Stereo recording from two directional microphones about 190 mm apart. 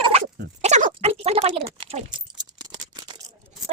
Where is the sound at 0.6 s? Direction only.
35° right (ahead or behind).